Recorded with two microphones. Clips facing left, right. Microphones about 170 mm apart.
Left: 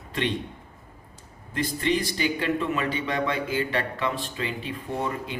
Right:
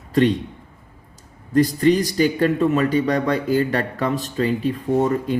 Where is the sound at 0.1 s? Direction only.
40° right (ahead or behind).